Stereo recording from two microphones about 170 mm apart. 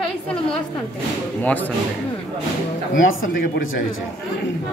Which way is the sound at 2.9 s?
75° left (ahead or behind).